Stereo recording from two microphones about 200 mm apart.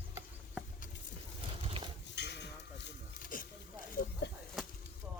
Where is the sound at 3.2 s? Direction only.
45° left (ahead or behind).